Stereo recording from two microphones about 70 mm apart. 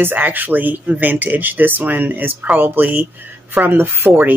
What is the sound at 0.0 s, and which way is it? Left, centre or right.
Speech, right.